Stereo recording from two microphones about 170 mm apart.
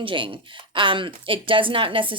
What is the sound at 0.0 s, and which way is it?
A woman's voice, 30° right (ahead or behind).